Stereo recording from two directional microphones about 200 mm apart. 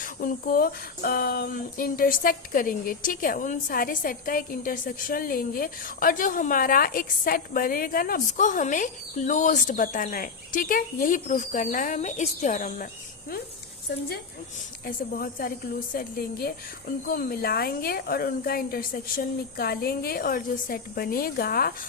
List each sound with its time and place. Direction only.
0.0 s speech: 45° left (ahead or behind)
14.8 s speech: 45° left (ahead or behind)